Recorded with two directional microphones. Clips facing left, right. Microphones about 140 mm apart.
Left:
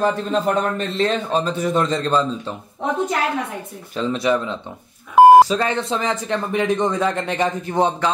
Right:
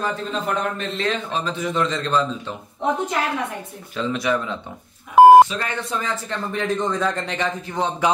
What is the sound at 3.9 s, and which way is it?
Music, 25° left (ahead or behind).